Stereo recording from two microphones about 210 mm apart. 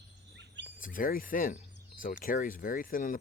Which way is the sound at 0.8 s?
40° left (ahead or behind).